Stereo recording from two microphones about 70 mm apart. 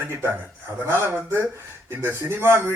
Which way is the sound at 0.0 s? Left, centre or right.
Right.